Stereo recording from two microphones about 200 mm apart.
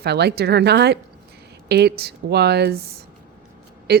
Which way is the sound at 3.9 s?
50° right (ahead or behind).